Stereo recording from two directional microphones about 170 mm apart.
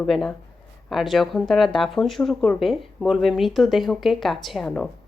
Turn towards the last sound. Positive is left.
turn(degrees=5)  # may be behind; listen again after turning